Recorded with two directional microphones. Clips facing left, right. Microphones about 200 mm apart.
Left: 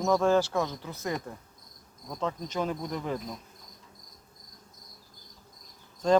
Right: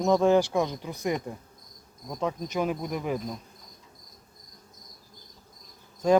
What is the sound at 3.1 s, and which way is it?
Insect, centre (ahead or behind).